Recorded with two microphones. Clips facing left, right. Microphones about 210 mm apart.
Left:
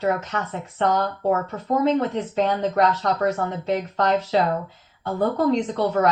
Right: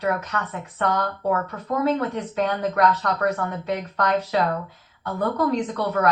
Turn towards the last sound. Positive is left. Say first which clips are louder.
# left 2 dB
turn(degrees=25)  # may be behind; listen again after turning